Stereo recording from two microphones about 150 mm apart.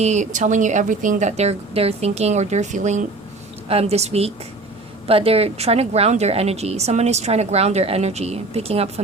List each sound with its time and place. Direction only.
0.0 s a woman's voice: 50° right (ahead or behind)
3.7 s a woman's voice: 45° right (ahead or behind)